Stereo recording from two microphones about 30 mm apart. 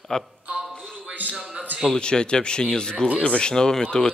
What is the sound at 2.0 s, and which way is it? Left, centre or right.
Speech, left.